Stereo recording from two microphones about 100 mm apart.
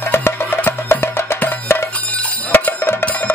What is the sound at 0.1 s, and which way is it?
Wood block, 25° left (ahead or behind).